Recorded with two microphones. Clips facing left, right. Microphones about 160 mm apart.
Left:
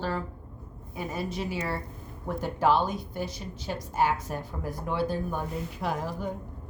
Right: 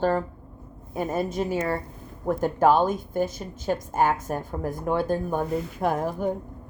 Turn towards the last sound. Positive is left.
turn(degrees=-50)  # may be behind; listen again after turning